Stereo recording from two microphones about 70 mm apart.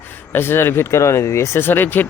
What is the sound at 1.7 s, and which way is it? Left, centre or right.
Speech, left.